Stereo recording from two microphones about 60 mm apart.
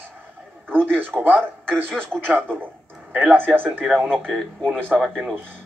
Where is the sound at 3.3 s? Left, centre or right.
Right.